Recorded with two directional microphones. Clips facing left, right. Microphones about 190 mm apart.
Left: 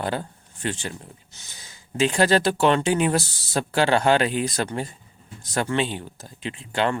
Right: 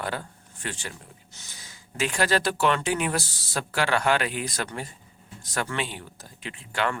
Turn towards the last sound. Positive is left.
turn(degrees=25)  # may be behind; listen again after turning